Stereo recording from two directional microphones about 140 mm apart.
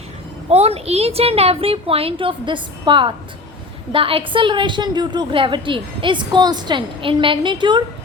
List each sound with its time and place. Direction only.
0.5 s a woman's voice: 45° right (ahead or behind)